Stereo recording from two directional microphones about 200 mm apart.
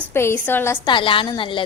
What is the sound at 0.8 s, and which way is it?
Speech, 25° left (ahead or behind).